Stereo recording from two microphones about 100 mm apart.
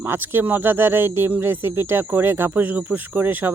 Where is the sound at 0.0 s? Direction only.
25° right (ahead or behind).